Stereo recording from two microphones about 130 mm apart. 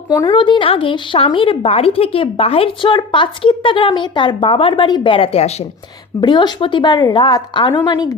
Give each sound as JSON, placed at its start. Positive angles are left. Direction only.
{"t": 0.1, "sound": "speech", "side_deg": 30}
{"t": 6.1, "sound": "speech", "side_deg": 35}